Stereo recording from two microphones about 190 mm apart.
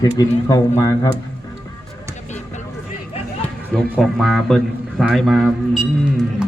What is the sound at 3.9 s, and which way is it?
A man's voice, centre (ahead or behind).